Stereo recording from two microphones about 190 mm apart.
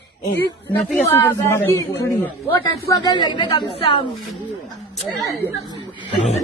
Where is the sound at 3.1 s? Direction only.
25° left (ahead or behind).